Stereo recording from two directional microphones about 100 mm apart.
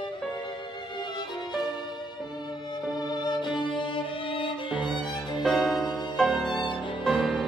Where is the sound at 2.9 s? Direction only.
40° left (ahead or behind); by 4.7 s 60° left (ahead or behind).